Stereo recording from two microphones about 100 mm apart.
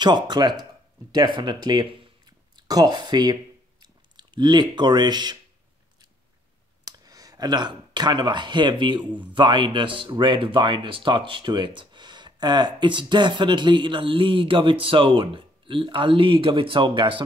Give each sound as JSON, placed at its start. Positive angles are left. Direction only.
{"t": 0.0, "sound": "speech", "side_deg": -45}
{"t": 6.9, "sound": "speech", "side_deg": -35}